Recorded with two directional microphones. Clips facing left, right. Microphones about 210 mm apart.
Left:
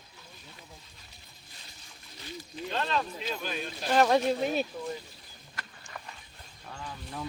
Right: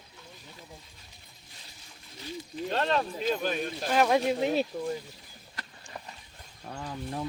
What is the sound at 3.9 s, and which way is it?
Speech, 10° right (ahead or behind).